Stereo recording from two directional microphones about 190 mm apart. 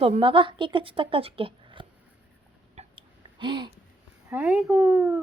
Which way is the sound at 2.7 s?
25° right (ahead or behind).